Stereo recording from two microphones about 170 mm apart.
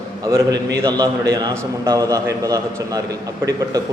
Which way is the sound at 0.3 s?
20° right (ahead or behind).